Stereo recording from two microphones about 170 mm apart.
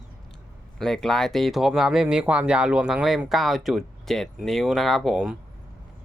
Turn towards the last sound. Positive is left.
turn(degrees=-5)  # may be behind; listen again after turning